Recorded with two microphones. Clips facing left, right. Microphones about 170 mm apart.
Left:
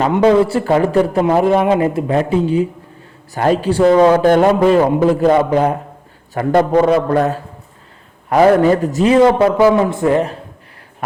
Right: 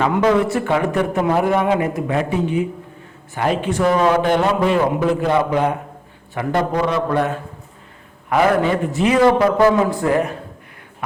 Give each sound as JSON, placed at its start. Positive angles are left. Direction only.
{"t": 0.0, "sound": "a man's voice", "side_deg": 30}
{"t": 4.2, "sound": "a man's voice", "side_deg": 45}
{"t": 9.1, "sound": "a woman's voice", "side_deg": 25}